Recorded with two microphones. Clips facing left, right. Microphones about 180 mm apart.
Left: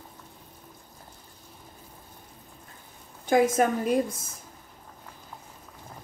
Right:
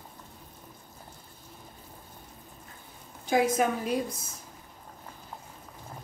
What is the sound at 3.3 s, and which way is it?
Speech, 50° left (ahead or behind).